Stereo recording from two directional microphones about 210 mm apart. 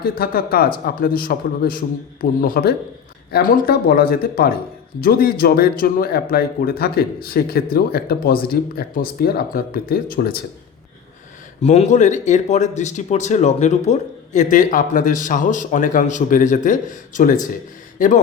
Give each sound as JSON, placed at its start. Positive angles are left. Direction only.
{"t": 0.0, "sound": "speech", "side_deg": 45}
{"t": 11.6, "sound": "speech", "side_deg": 30}